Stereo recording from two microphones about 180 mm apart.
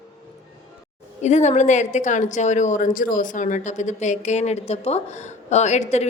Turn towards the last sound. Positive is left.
turn(degrees=40)  # may be behind; listen again after turning